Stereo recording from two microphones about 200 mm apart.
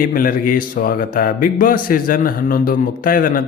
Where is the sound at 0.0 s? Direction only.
45° left (ahead or behind).